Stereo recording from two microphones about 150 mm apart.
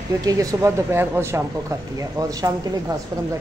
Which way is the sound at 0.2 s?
25° right (ahead or behind).